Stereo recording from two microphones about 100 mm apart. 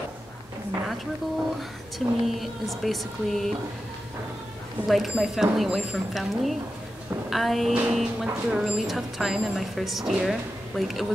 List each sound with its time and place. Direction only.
2.0 s speech: centre (ahead or behind)
4.8 s a woman's voice: centre (ahead or behind)